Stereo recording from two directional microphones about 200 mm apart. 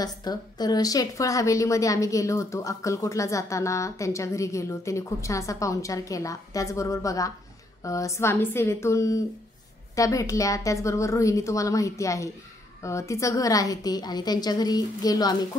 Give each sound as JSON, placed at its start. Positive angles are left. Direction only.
{"t": 0.0, "sound": "a woman's voice", "side_deg": 20}